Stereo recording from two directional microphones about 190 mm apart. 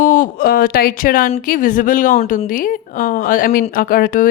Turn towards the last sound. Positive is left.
turn(degrees=45)  # may be behind; listen again after turning